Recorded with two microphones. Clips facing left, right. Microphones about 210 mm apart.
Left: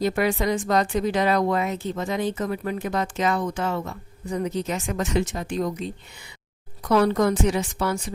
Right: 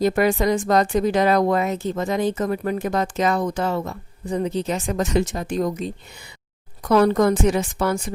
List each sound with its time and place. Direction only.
0.0 s speech: 45° right (ahead or behind)